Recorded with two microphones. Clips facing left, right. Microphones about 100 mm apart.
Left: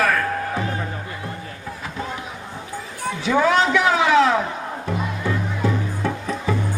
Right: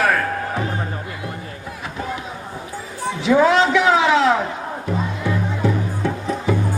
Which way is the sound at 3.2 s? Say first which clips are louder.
Right 3 dB; 30° right (ahead or behind).